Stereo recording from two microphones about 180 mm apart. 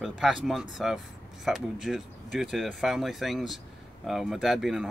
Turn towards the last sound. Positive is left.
turn(degrees=0)  # may be behind; listen again after turning